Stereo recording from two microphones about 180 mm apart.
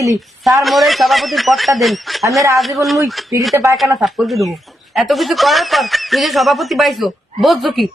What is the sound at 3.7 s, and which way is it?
Speech, centre (ahead or behind).